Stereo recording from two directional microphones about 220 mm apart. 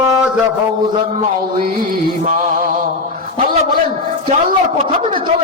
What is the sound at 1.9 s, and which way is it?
Speech, 40° right (ahead or behind).